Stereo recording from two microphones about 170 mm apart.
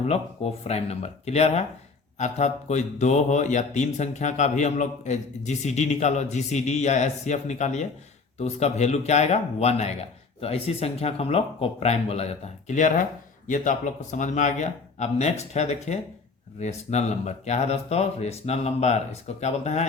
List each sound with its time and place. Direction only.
0.0 s speech: 35° left (ahead or behind)